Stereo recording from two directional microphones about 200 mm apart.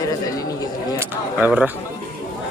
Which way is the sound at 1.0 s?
10° right (ahead or behind).